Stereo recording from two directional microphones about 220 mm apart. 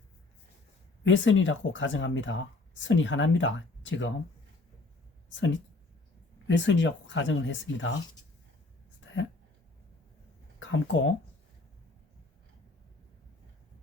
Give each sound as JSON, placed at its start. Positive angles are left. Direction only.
{"t": 1.0, "sound": "speech", "side_deg": 60}
{"t": 5.3, "sound": "speech", "side_deg": 60}
{"t": 10.6, "sound": "speech", "side_deg": 60}